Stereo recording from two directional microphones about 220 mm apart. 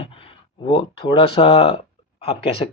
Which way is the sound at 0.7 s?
20° left (ahead or behind).